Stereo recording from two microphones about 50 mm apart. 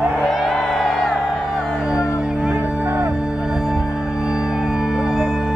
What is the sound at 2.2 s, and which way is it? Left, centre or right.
Music, right.